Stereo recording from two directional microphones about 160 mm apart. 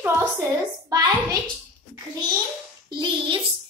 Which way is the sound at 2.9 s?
30° right (ahead or behind).